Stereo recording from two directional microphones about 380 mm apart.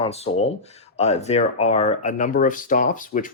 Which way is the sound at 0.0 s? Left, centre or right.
Centre.